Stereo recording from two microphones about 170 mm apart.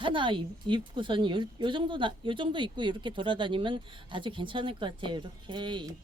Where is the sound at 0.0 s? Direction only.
30° right (ahead or behind).